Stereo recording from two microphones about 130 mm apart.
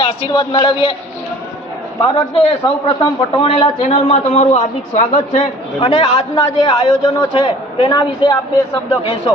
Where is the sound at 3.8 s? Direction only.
50° left (ahead or behind).